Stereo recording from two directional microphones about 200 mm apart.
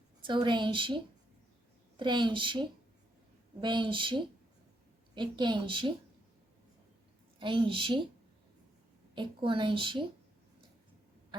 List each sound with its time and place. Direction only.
0.3 s a woman's voice: 25° right (ahead or behind)
7.3 s a woman's voice: 25° right (ahead or behind)
9.1 s a woman's voice: 25° right (ahead or behind)